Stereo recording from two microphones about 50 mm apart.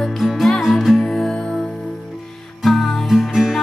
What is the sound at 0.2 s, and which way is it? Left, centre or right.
Music, centre.